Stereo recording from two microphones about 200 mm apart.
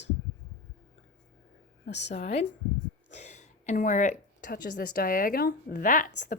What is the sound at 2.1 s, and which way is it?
A woman's voice, 30° left (ahead or behind).